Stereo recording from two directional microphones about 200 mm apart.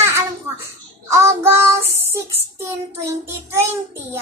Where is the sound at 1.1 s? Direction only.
15° right (ahead or behind).